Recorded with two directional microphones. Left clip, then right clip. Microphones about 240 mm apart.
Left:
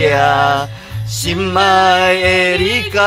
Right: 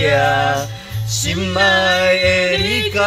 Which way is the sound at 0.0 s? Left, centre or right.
Left.